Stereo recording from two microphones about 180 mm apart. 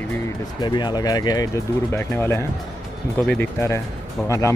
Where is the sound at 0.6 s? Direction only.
25° left (ahead or behind).